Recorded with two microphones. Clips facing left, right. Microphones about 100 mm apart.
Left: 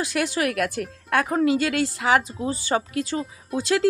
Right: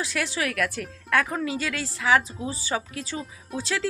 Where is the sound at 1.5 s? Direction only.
60° left (ahead or behind).